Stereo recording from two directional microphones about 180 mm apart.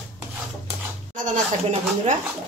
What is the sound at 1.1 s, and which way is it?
Speech, 45° right (ahead or behind).